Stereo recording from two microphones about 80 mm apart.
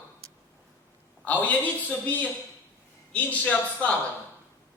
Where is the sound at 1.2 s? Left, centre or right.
Centre.